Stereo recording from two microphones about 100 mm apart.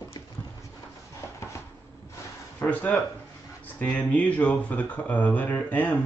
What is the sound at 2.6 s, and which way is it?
Speech, 15° left (ahead or behind).